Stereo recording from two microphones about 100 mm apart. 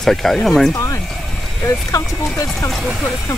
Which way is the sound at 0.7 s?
30° left (ahead or behind).